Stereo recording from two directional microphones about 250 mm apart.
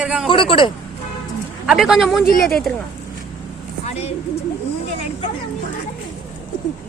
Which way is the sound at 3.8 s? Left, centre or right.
Left.